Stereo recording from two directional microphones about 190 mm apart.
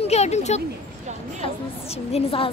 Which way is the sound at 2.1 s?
30° left (ahead or behind).